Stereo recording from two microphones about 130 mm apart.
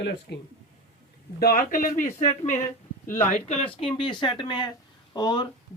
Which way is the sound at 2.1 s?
60° left (ahead or behind).